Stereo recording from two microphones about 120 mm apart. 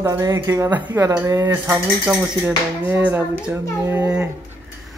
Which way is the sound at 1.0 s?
25° right (ahead or behind).